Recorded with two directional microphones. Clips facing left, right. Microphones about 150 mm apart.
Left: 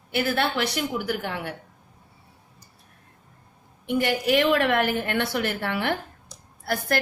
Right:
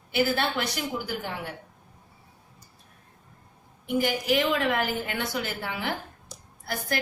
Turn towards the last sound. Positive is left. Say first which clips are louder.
# left 5 dB
turn(degrees=65)  # may be behind; listen again after turning